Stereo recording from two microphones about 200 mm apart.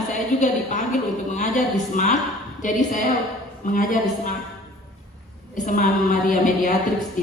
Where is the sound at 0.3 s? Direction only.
35° left (ahead or behind).